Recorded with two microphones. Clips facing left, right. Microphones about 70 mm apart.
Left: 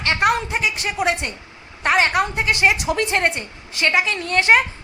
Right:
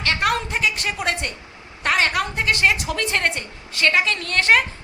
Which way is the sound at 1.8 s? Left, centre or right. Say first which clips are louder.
Left 3 dB; left.